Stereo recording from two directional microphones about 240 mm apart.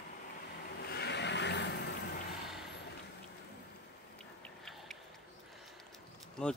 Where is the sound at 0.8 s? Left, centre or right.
Left.